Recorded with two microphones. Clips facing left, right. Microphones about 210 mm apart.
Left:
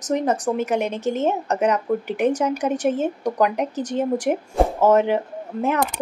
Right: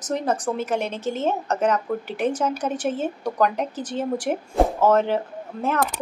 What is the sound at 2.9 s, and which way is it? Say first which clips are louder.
A woman's voice: left 4 dB; 15° left (ahead or behind).